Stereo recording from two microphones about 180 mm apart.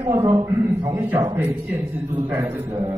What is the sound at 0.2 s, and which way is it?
Speech, 30° right (ahead or behind).